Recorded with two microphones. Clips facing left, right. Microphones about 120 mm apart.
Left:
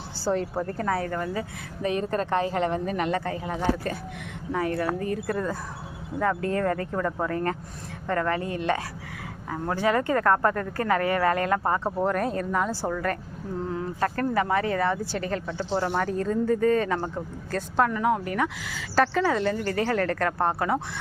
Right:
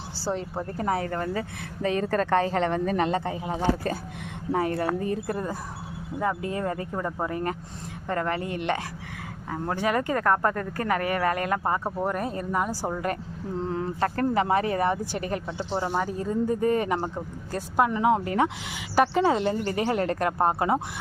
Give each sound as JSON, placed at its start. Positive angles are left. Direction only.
{"t": 0.3, "sound": "a woman's voice", "side_deg": 0}
{"t": 0.8, "sound": "speech", "side_deg": -20}
{"t": 1.1, "sound": "speech", "side_deg": -40}
{"t": 3.1, "sound": "speech", "side_deg": -20}
{"t": 4.5, "sound": "speech", "side_deg": -35}
{"t": 13.6, "sound": "speech", "side_deg": -30}